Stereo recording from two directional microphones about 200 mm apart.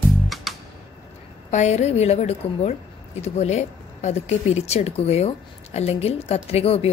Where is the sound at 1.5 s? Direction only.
35° left (ahead or behind).